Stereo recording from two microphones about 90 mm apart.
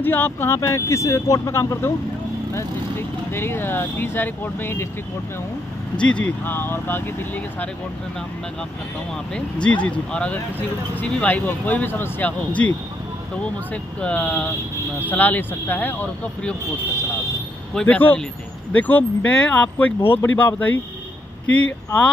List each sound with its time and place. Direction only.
0.0 s speech: 25° left (ahead or behind)
5.9 s speech: 10° left (ahead or behind)
9.3 s speech: 15° left (ahead or behind)
14.0 s speech: 15° left (ahead or behind)
17.8 s speech: 15° left (ahead or behind)